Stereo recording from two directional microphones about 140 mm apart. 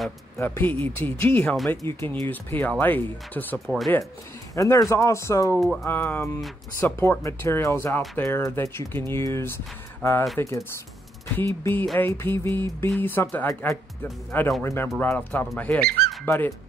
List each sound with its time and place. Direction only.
0.4 s speech: 15° left (ahead or behind)
3.5 s speech: centre (ahead or behind)
4.6 s speech: 20° left (ahead or behind)
11.3 s speech: 15° left (ahead or behind)